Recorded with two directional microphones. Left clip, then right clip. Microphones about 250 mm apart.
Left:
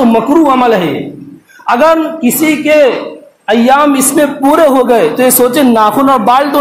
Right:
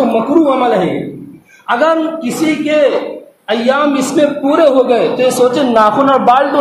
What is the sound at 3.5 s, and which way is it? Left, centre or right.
A man's voice, left.